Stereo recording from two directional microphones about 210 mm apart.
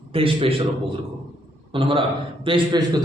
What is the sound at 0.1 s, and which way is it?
Speech, 25° right (ahead or behind).